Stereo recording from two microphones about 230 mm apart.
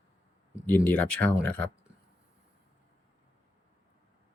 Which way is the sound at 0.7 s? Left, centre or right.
Centre.